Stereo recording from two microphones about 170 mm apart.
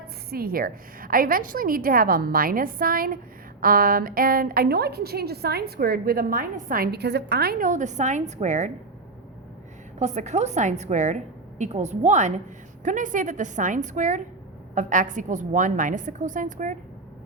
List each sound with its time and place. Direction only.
0.3 s a woman's voice: 60° right (ahead or behind); by 8.7 s 45° right (ahead or behind)
10.0 s a woman's voice: 40° right (ahead or behind)